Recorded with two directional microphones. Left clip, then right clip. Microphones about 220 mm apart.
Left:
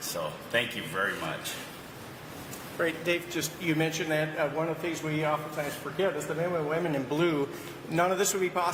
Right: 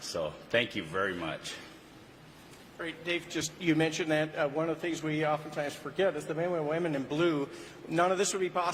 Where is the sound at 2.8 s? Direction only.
40° right (ahead or behind).